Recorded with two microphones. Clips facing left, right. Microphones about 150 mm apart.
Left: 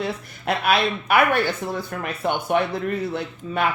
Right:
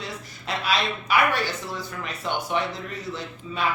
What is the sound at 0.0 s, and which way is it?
Speech, 55° left (ahead or behind).